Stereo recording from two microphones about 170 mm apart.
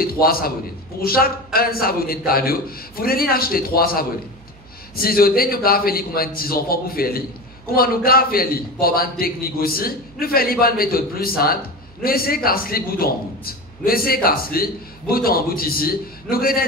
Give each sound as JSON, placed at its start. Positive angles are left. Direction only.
{"t": 0.0, "sound": "a man's voice", "side_deg": 60}